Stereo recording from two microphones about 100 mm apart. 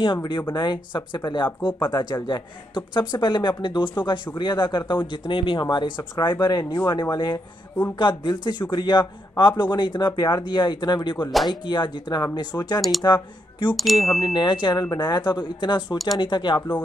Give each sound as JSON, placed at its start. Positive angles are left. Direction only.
{"t": 0.0, "sound": "speech", "side_deg": 50}
{"t": 13.7, "sound": "chime", "side_deg": 0}
{"t": 14.2, "sound": "speech", "side_deg": 50}